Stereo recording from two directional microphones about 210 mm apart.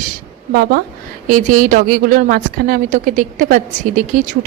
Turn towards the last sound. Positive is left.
turn(degrees=-40)  # may be behind; listen again after turning